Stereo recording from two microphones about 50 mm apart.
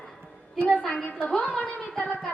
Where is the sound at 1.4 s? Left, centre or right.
Left.